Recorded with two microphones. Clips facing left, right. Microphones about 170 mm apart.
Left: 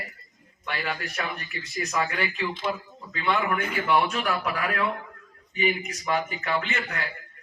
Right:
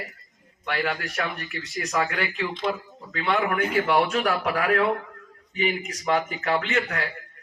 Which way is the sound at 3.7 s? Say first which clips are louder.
Right 2 dB; 60° right (ahead or behind).